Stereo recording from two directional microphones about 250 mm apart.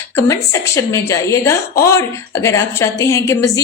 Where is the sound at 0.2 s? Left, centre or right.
Centre.